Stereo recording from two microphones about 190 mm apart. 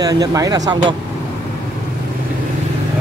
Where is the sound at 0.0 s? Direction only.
20° right (ahead or behind).